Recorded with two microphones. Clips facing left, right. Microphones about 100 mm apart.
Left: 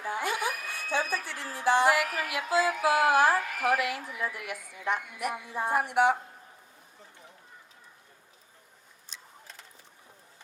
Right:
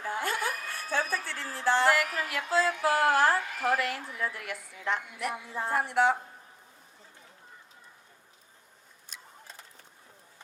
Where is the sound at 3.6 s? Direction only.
15° left (ahead or behind).